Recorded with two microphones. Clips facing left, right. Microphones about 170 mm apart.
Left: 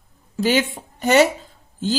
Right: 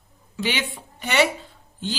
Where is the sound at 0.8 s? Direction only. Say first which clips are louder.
Left 4 dB; 40° left (ahead or behind).